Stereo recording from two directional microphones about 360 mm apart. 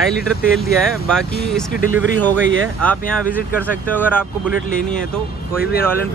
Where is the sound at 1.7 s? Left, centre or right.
Left.